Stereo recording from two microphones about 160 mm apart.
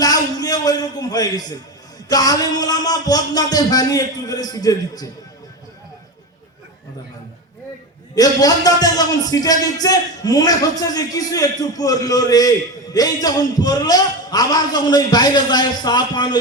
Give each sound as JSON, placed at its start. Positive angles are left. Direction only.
{"t": 0.0, "sound": "a sound", "side_deg": 25}
{"t": 2.0, "sound": "a man's voice", "side_deg": 25}
{"t": 8.1, "sound": "a man's voice", "side_deg": 25}